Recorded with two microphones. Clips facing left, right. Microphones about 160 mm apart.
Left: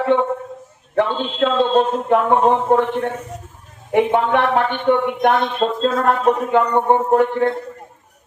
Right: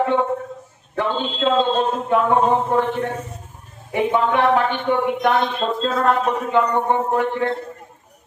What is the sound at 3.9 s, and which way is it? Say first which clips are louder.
Speech: left 3 dB; 60° left (ahead or behind).